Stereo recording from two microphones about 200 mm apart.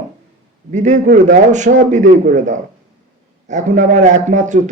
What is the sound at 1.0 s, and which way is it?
Speech, 55° right (ahead or behind).